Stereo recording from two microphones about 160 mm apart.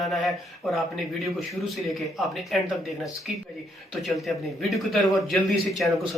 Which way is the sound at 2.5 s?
Centre (ahead or behind).